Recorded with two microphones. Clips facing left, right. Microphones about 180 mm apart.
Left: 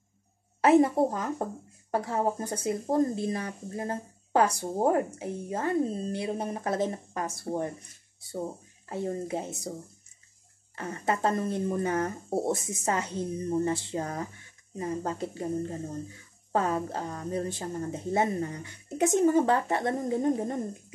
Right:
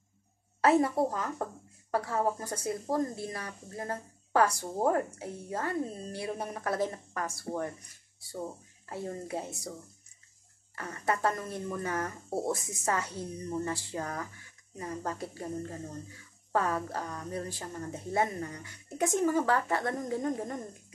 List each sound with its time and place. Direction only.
0.6 s speech: 20° left (ahead or behind)
10.8 s speech: 25° left (ahead or behind)